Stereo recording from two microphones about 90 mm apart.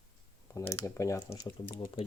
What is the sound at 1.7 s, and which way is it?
Speech, 70° left (ahead or behind).